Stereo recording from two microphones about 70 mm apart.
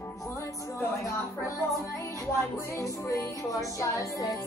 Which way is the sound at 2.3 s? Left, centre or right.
Left.